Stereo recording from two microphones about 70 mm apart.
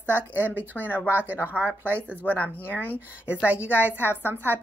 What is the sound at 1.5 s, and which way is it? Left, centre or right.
Speech, left.